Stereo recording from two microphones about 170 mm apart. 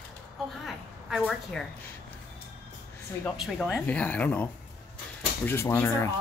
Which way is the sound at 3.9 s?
10° left (ahead or behind).